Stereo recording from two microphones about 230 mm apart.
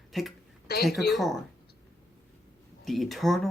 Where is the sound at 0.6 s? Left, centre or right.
Left.